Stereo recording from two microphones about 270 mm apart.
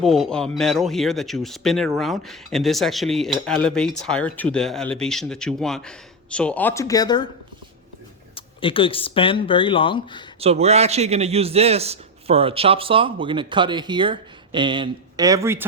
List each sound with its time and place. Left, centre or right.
0.0 s speech: centre
8.4 s speech: centre
10.4 s a man's voice: right